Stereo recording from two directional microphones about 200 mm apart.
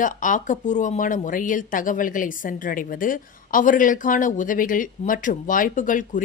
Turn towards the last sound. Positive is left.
turn(degrees=40)  # may be behind; listen again after turning